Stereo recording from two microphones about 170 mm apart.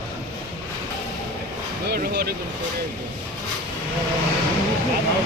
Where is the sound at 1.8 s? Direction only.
70° right (ahead or behind).